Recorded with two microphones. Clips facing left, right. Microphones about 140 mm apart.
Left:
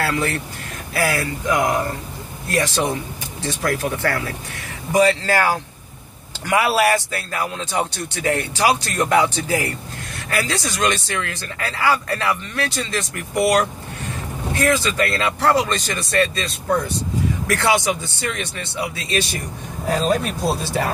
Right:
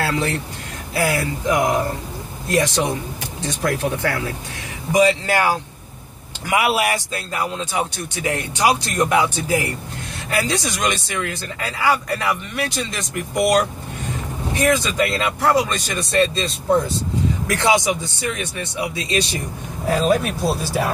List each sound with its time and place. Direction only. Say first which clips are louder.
0.0 s speech: even; 20° right (ahead or behind)
16.1 s speech: right 2 dB; 25° right (ahead or behind)
19.9 s speech: right 2 dB; 5° right (ahead or behind)